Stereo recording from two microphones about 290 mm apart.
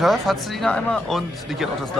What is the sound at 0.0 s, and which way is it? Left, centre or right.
Speech, centre.